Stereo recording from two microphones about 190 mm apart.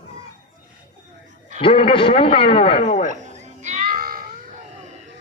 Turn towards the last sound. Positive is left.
turn(degrees=-50)  # may be behind; listen again after turning